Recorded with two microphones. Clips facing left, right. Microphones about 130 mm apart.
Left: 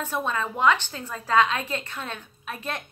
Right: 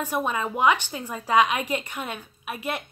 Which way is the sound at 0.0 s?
15° right (ahead or behind).